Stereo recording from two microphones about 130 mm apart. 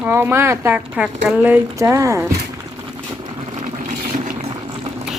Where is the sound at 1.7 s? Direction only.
25° right (ahead or behind).